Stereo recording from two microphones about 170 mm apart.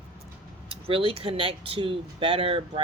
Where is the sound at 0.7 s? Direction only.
30° right (ahead or behind).